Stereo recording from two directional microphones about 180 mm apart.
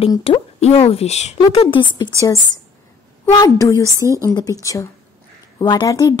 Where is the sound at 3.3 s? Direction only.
20° left (ahead or behind).